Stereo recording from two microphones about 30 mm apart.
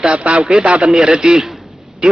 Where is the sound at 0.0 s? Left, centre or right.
Right.